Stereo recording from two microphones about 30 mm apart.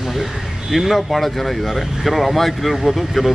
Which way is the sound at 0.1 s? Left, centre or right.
Centre.